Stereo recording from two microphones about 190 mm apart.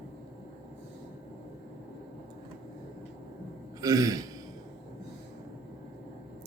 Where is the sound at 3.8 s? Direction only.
20° right (ahead or behind).